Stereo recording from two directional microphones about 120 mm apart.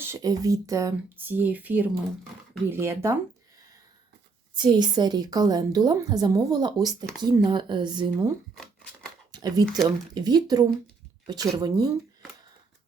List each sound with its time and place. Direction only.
0.0 s speech: 25° right (ahead or behind)
1.1 s speech: 15° right (ahead or behind)
4.5 s a woman's voice: 40° right (ahead or behind)
9.3 s a sound: 35° right (ahead or behind)
9.8 s a woman's voice: 35° right (ahead or behind)